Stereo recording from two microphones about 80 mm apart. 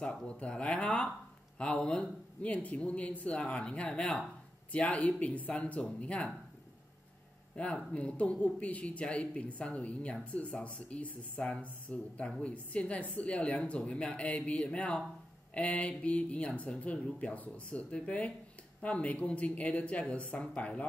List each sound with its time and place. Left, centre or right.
0.0 s speech: centre
7.5 s speech: centre